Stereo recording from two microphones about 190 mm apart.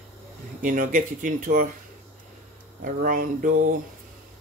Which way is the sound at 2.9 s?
45° right (ahead or behind).